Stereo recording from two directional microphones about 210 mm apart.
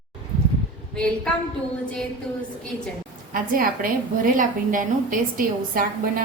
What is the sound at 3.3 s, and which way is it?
A woman's voice, 40° right (ahead or behind).